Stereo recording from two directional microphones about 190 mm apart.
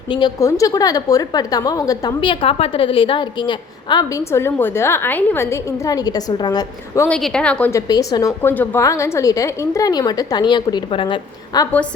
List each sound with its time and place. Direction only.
0.1 s a woman's voice: 20° left (ahead or behind)
7.1 s a woman's voice: 5° left (ahead or behind)
7.9 s a woman's voice: 20° left (ahead or behind)